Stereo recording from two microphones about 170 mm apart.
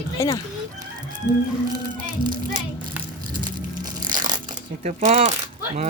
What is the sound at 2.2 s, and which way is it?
Speech, 60° right (ahead or behind).